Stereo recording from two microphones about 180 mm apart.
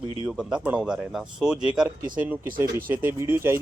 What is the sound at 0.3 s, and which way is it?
Speech, 5° right (ahead or behind).